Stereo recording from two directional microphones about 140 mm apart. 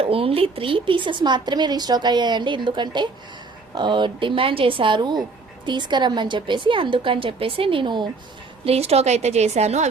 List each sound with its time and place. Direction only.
0.0 s a woman's voice: 40° right (ahead or behind)
8.6 s a woman's voice: 45° right (ahead or behind)